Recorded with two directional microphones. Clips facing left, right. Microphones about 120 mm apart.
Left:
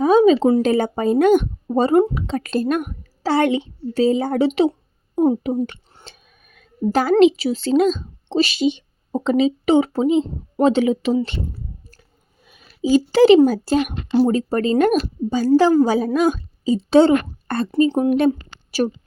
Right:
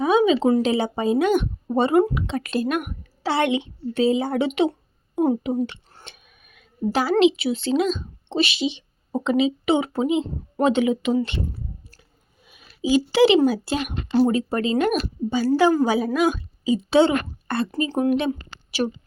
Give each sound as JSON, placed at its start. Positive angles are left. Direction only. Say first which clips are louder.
{"t": 0.0, "sound": "a sound", "louder": "left 5 dB", "side_deg": 40}
{"t": 0.6, "sound": "a woman's voice", "louder": "left 3 dB", "side_deg": 45}
{"t": 1.7, "sound": "a woman's voice", "louder": "left 3 dB", "side_deg": 35}
{"t": 12.5, "sound": "a child's voice", "louder": "left 4 dB", "side_deg": 40}
{"t": 17.7, "sound": "speech", "louder": "left 6 dB", "side_deg": 30}
{"t": 18.3, "sound": "a sound", "louder": "left 7 dB", "side_deg": 40}